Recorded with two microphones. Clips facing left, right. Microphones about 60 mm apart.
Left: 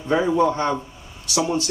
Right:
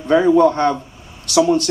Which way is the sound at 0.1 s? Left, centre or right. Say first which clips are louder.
Right 6 dB; right.